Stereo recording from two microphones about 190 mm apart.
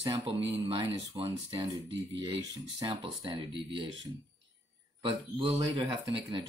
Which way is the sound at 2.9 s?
25° right (ahead or behind).